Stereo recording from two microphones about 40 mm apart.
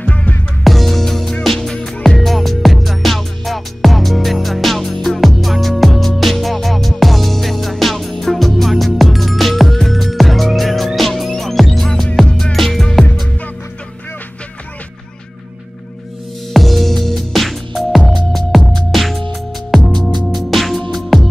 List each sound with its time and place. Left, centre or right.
0.0 s music: left
0.7 s music: centre
16.5 s music: centre